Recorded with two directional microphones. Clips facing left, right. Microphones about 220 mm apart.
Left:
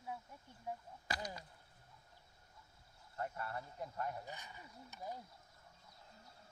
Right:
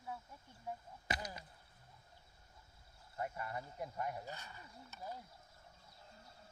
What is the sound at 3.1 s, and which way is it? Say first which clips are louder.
Speech: right 1 dB; 10° right (ahead or behind).